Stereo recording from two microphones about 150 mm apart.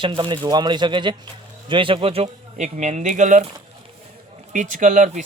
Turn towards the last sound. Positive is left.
turn(degrees=-55)  # may be behind; listen again after turning